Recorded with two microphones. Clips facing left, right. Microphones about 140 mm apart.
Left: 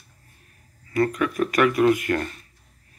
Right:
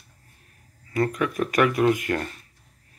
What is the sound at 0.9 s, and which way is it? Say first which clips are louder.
Speech: left 2 dB; 20° right (ahead or behind).